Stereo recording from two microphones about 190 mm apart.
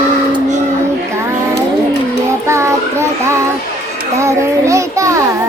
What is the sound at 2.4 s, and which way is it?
Child singing, 15° right (ahead or behind).